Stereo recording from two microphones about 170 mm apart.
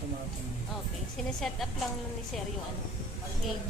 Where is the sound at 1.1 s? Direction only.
Centre (ahead or behind).